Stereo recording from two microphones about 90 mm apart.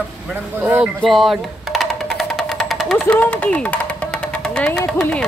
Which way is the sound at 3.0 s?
15° left (ahead or behind).